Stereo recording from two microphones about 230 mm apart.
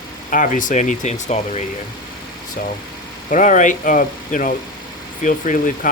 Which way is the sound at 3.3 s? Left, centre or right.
Left.